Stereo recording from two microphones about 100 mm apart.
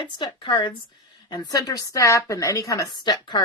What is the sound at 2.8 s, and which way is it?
Speech, 45° left (ahead or behind).